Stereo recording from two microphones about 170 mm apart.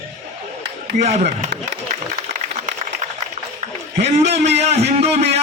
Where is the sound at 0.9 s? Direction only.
45° right (ahead or behind).